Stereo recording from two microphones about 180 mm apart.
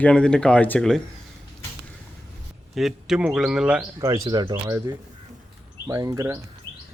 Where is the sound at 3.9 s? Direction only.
20° right (ahead or behind).